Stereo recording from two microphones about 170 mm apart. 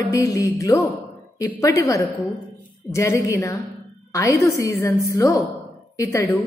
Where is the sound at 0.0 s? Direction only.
20° left (ahead or behind).